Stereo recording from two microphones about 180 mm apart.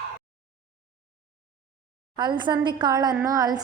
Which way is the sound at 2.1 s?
25° right (ahead or behind).